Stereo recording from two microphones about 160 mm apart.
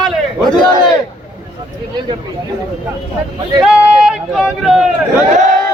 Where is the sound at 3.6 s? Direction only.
5° right (ahead or behind).